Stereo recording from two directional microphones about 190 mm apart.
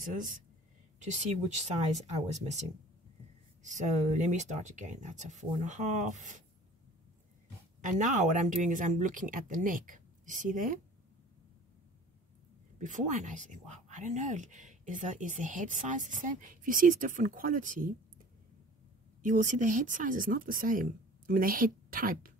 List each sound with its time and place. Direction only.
0.9 s speech: 40° right (ahead or behind)
3.6 s speech: 40° right (ahead or behind)
7.8 s speech: 40° right (ahead or behind)
12.7 s speech: 40° right (ahead or behind)
19.2 s speech: 40° right (ahead or behind)